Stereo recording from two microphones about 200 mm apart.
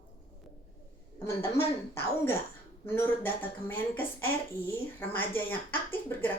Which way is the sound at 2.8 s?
10° left (ahead or behind).